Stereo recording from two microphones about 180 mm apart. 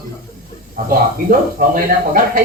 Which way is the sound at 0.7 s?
55° right (ahead or behind).